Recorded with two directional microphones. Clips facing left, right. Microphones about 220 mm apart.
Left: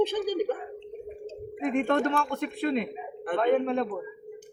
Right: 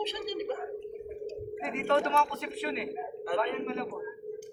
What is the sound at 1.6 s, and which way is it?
A man's voice, 50° left (ahead or behind).